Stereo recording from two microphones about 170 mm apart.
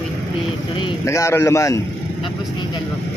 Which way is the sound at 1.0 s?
15° left (ahead or behind).